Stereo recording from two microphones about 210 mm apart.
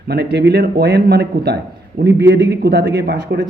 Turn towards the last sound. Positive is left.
turn(degrees=-50)  # may be behind; listen again after turning